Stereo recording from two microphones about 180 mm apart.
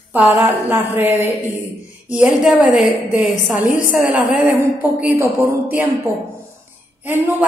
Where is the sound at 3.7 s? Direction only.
50° left (ahead or behind).